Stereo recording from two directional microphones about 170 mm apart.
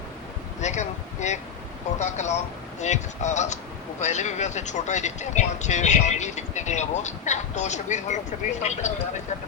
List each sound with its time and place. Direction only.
0.6 s speech: 45° left (ahead or behind)